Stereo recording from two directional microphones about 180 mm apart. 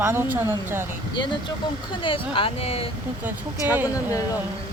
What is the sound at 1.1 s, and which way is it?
Speech, 25° left (ahead or behind).